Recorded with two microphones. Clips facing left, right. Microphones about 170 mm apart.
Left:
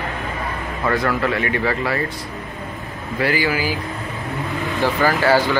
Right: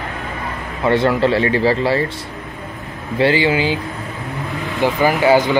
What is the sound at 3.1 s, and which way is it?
Speech, 25° right (ahead or behind).